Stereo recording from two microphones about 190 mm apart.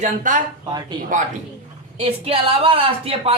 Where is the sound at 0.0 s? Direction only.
45° right (ahead or behind).